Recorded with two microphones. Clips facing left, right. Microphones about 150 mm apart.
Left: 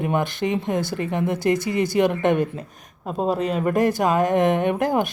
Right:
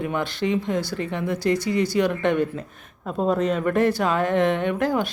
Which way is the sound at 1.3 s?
50° left (ahead or behind).